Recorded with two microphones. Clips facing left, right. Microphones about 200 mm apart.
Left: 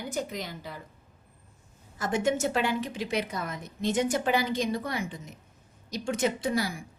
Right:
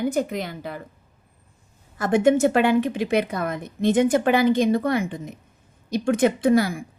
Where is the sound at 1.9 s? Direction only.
60° right (ahead or behind).